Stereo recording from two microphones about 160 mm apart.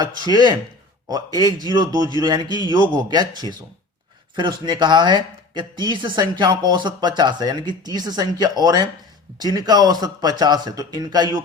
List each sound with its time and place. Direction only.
0.0 s speech: 25° right (ahead or behind)